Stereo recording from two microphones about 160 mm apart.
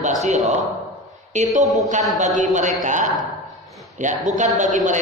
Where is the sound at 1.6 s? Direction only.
Centre (ahead or behind).